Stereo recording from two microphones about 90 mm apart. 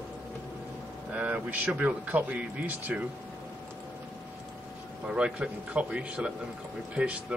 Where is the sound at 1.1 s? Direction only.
15° right (ahead or behind).